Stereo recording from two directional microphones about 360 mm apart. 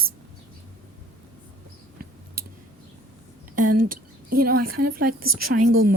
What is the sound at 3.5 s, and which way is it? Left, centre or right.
Speech, right.